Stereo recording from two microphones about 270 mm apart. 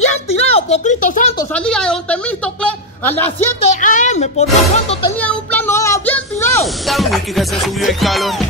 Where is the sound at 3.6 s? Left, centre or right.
Left.